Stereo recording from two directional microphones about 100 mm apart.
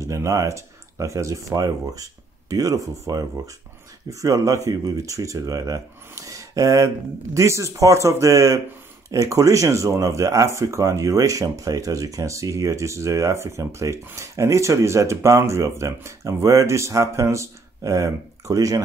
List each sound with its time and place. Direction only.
0.0 s speech: 30° right (ahead or behind)